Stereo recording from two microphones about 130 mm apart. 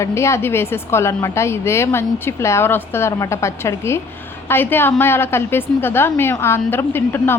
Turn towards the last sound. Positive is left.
turn(degrees=15)  # may be behind; listen again after turning